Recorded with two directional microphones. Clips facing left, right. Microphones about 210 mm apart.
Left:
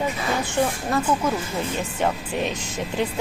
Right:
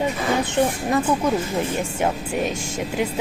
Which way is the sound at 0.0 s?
20° right (ahead or behind).